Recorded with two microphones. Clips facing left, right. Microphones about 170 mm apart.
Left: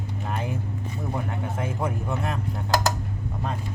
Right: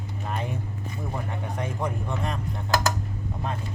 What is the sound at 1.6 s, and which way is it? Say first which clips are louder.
Speech: left 1 dB; 5° left (ahead or behind).